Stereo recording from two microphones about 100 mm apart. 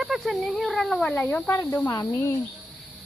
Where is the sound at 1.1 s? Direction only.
15° left (ahead or behind).